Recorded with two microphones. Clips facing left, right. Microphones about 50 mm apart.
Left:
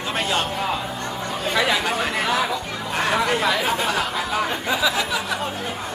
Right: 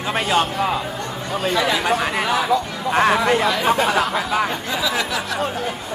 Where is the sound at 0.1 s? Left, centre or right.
Centre.